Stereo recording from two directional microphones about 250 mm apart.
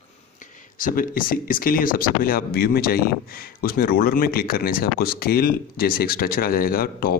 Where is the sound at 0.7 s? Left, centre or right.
Left.